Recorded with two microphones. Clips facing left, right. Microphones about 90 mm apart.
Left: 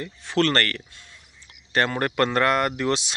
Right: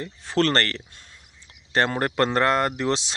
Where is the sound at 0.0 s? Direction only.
35° right (ahead or behind).